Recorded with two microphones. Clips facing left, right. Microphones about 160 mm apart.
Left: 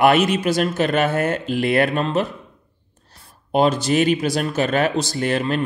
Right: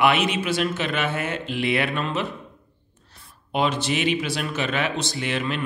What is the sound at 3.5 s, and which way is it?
Speech, 40° left (ahead or behind).